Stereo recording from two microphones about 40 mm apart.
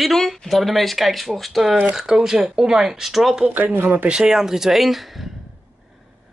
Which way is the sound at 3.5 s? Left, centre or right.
Right.